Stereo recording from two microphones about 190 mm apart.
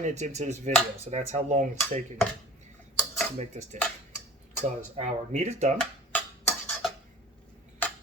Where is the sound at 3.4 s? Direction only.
35° right (ahead or behind).